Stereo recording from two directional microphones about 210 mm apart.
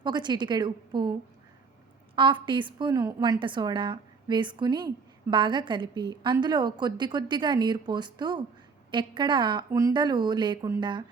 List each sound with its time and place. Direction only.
0.0 s a woman's voice: 20° right (ahead or behind)
2.1 s a woman's voice: 20° right (ahead or behind)